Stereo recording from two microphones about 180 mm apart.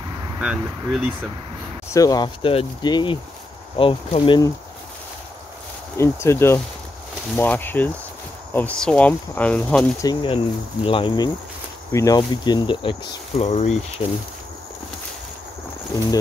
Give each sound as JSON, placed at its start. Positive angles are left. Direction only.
{"t": 0.4, "sound": "speech", "side_deg": -5}
{"t": 1.9, "sound": "speech", "side_deg": 20}
{"t": 5.9, "sound": "speech", "side_deg": 15}
{"t": 10.0, "sound": "speech", "side_deg": 30}
{"t": 13.4, "sound": "speech", "side_deg": 40}